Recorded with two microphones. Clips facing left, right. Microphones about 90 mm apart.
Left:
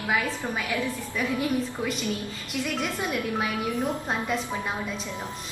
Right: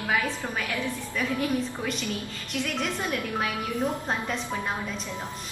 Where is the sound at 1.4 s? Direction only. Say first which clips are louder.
Left 1 dB; 15° left (ahead or behind).